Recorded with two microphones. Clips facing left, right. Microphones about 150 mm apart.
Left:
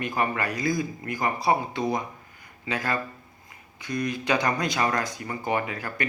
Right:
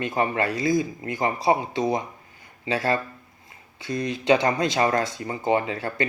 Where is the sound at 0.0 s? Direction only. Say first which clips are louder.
Right 3 dB; 25° right (ahead or behind).